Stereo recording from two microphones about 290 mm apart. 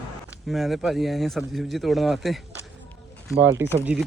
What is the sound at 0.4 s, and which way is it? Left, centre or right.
Speech, centre.